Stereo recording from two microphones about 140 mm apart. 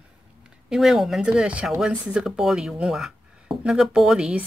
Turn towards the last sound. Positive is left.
turn(degrees=-5)  # may be behind; listen again after turning